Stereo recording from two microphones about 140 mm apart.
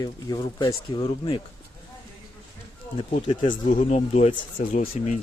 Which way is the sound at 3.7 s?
50° left (ahead or behind).